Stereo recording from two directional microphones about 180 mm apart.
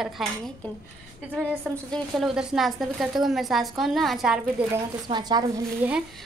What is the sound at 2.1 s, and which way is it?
A woman's voice, 5° right (ahead or behind).